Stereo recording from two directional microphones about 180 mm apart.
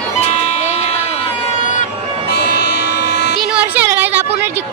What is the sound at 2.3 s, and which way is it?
Music, 65° left (ahead or behind).